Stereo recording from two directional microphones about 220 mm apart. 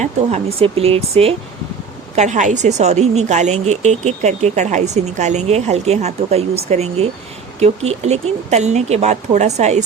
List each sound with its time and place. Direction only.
0.0 s a woman's voice: 30° right (ahead or behind)